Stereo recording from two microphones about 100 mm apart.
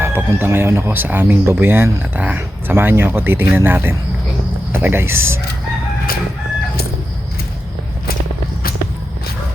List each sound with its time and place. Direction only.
0.0 s speech: 20° right (ahead or behind)